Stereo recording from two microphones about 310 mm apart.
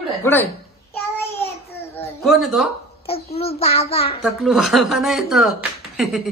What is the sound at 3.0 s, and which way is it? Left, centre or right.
A child's voice, centre.